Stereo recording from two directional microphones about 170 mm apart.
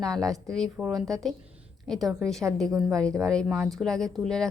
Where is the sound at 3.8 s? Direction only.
Centre (ahead or behind).